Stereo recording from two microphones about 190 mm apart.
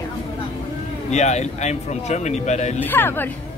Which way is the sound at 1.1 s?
35° left (ahead or behind).